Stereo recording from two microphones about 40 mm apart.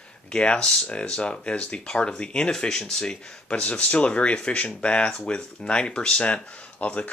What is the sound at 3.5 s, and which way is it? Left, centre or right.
Speech, left.